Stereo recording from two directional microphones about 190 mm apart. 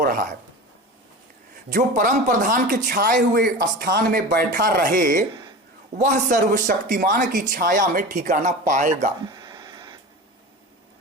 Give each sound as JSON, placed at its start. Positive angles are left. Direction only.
{"t": 0.0, "sound": "speech", "side_deg": -45}
{"t": 1.7, "sound": "speech", "side_deg": -45}
{"t": 9.2, "sound": "a sound", "side_deg": -20}